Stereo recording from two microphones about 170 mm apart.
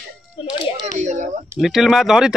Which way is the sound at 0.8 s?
45° right (ahead or behind).